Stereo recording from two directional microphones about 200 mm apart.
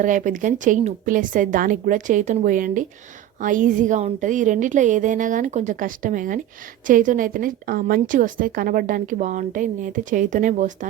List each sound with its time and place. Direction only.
0.0 s a woman's voice: 40° right (ahead or behind)